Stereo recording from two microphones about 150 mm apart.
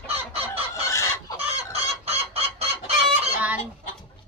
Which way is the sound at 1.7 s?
40° right (ahead or behind).